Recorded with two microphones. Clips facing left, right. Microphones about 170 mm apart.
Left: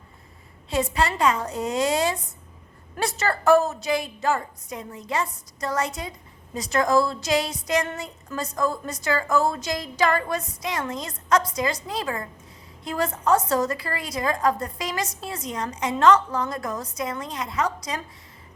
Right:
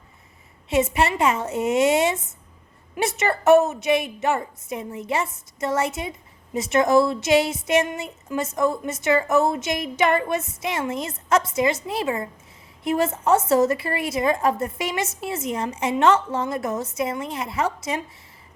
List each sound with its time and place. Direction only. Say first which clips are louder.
0.7 s a woman's voice: right 3 dB; 25° right (ahead or behind)